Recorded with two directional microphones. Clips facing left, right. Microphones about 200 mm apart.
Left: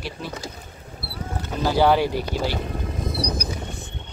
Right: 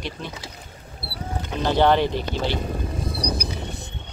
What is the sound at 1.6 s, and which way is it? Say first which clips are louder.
Speech: even; 5° left (ahead or behind).